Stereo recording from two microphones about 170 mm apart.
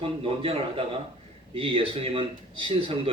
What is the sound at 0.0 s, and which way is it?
Speech, 35° right (ahead or behind).